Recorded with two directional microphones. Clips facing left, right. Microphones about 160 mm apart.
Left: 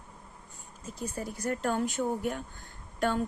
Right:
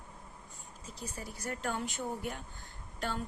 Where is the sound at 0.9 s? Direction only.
50° left (ahead or behind).